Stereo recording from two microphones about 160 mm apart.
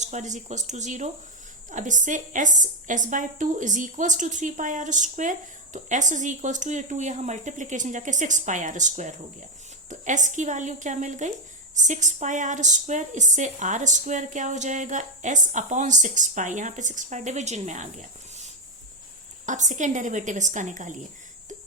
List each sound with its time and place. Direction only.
0.0 s a woman's voice: 45° right (ahead or behind)